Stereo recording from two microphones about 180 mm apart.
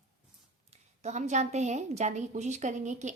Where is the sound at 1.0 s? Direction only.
40° right (ahead or behind).